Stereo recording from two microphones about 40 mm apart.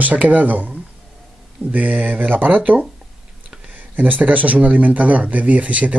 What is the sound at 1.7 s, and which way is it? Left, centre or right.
Speech, right.